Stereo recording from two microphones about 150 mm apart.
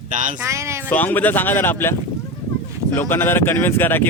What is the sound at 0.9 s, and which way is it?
Speech, 10° left (ahead or behind).